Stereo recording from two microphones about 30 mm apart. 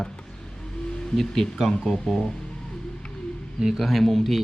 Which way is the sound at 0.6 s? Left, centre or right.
Left.